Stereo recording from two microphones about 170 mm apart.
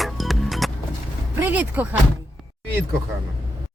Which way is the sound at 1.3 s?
10° right (ahead or behind).